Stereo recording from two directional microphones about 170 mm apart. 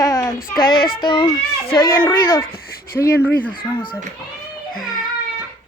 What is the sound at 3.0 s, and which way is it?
Speech, centre (ahead or behind).